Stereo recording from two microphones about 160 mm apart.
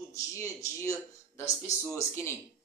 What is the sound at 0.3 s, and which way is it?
Speech, 20° left (ahead or behind).